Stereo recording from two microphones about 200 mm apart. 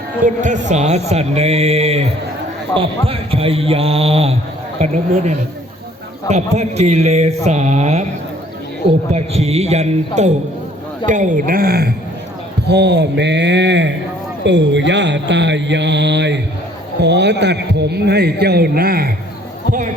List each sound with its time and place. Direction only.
0.3 s a man's voice: 40° right (ahead or behind)
9.1 s a man's voice: 30° right (ahead or behind); by 19.1 s 50° right (ahead or behind)